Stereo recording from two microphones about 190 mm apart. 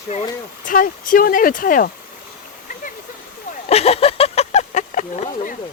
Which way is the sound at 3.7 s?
30° left (ahead or behind).